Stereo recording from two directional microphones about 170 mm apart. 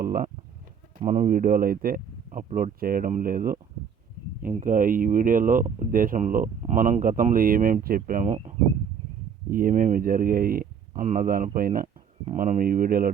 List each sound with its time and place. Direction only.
0.0 s speech: 60° right (ahead or behind)